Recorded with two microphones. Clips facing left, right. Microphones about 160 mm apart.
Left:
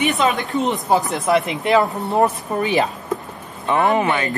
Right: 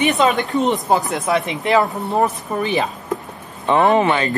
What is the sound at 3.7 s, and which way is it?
Speech, 20° right (ahead or behind).